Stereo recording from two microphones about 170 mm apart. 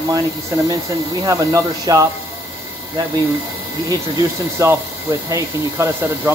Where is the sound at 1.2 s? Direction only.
20° right (ahead or behind).